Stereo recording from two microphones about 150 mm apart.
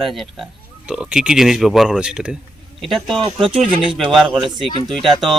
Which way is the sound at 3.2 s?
40° right (ahead or behind).